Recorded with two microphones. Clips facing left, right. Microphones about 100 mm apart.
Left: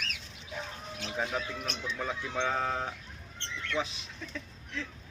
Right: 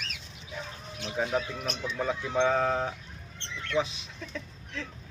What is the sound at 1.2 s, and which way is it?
Speech, 10° right (ahead or behind).